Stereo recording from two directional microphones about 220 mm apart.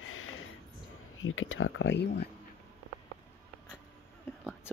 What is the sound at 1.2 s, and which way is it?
Speech, 65° left (ahead or behind).